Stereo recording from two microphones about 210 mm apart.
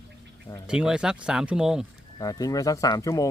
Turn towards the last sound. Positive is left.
turn(degrees=15)  # may be behind; listen again after turning